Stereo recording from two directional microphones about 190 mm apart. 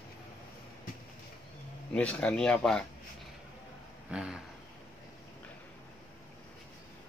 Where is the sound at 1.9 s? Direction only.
5° left (ahead or behind).